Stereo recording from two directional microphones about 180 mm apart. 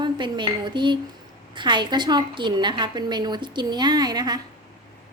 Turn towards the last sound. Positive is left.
turn(degrees=-20)  # may be behind; listen again after turning